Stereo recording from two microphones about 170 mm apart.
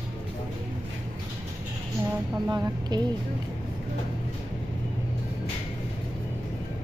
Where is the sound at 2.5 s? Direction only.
25° right (ahead or behind).